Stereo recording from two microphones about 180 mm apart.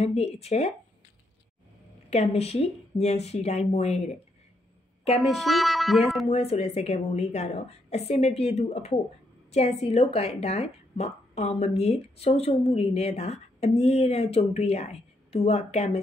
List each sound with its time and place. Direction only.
0.0 s speech: 35° left (ahead or behind)
2.0 s speech: 35° left (ahead or behind)
5.2 s speech: centre (ahead or behind)
6.2 s speech: 35° left (ahead or behind)